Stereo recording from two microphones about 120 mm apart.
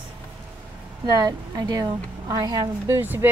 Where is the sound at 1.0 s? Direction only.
30° right (ahead or behind).